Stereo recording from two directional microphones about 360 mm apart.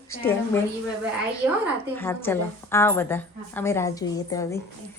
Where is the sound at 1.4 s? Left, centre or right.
Centre.